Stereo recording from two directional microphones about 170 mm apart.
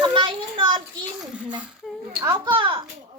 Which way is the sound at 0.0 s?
30° right (ahead or behind).